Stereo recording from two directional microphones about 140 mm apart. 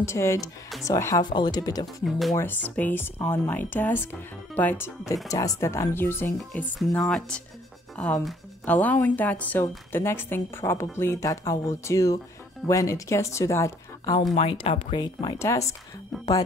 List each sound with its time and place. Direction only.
0.0 s speech: 20° left (ahead or behind)
1.2 s speech: 30° left (ahead or behind)
2.0 s speech: centre (ahead or behind)
2.3 s speech: 15° left (ahead or behind)
14.4 s speech: 40° left (ahead or behind); by 15.7 s 20° left (ahead or behind)